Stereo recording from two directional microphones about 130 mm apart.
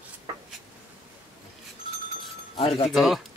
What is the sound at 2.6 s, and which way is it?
Speech, 50° left (ahead or behind).